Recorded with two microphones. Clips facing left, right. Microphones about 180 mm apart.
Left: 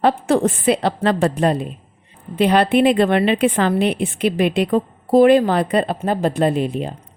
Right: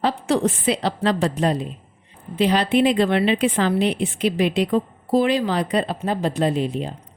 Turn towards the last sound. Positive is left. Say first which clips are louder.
# left 3 dB
turn(degrees=55)  # may be behind; listen again after turning